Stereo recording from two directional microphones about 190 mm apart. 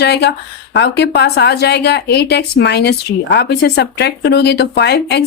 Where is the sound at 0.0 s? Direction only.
60° left (ahead or behind).